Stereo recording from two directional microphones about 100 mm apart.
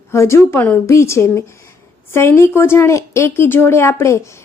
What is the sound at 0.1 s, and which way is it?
A woman's voice, 25° left (ahead or behind).